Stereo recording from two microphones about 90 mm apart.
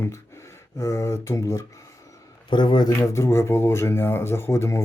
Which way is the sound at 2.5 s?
55° left (ahead or behind).